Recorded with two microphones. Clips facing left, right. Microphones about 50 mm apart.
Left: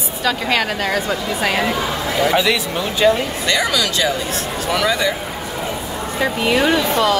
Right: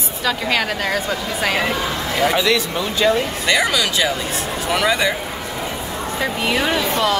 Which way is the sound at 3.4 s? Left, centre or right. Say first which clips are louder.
Even; centre.